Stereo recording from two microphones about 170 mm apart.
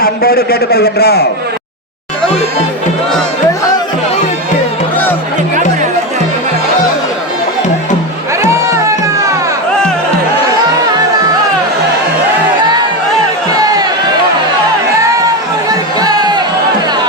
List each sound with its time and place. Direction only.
0.0 s a man's voice: 60° left (ahead or behind)
16.0 s music: 25° right (ahead or behind)